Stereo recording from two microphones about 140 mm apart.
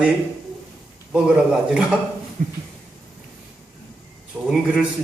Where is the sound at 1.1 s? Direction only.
5° right (ahead or behind).